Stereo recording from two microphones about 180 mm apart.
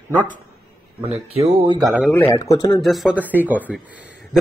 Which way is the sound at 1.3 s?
35° right (ahead or behind).